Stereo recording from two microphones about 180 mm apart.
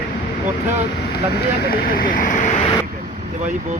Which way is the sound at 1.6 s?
55° left (ahead or behind).